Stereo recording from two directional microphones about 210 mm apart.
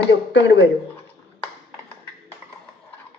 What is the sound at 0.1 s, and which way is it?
Speech, 60° left (ahead or behind).